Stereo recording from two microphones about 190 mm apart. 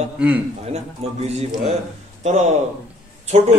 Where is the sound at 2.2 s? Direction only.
35° right (ahead or behind).